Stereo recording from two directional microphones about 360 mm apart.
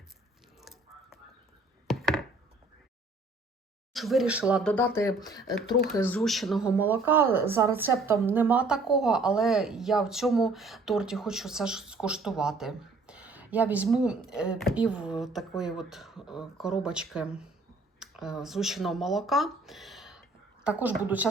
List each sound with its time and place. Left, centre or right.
0.6 s a sound: centre
1.9 s chopping: centre
3.9 s a woman's voice: centre